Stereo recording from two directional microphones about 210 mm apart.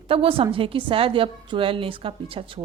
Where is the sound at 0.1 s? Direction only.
25° right (ahead or behind).